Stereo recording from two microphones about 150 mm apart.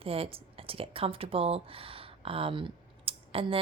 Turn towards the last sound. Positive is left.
turn(degrees=-40)  # may be behind; listen again after turning